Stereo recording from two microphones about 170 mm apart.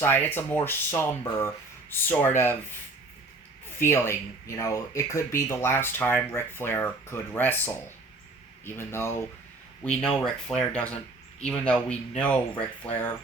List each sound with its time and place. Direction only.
0.0 s speech: 10° left (ahead or behind)
3.8 s speech: 15° left (ahead or behind)